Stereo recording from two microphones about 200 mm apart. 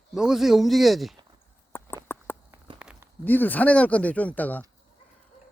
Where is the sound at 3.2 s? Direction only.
10° left (ahead or behind).